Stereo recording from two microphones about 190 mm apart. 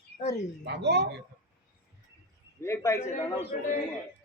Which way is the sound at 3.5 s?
40° left (ahead or behind).